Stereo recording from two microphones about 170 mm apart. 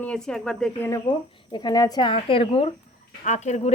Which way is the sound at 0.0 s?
5° left (ahead or behind).